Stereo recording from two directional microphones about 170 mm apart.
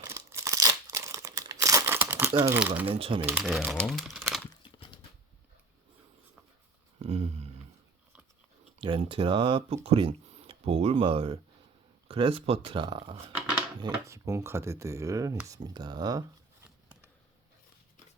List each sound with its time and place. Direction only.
0.0 s crumpling: 15° right (ahead or behind)
2.6 s chopping: 10° right (ahead or behind)
2.8 s speech: 35° right (ahead or behind)
3.2 s speech: 5° right (ahead or behind)
7.0 s a sound: 40° right (ahead or behind)
8.8 s speech: 30° right (ahead or behind)
14.0 s chopping: 15° right (ahead or behind)
15.4 s speech: 25° right (ahead or behind)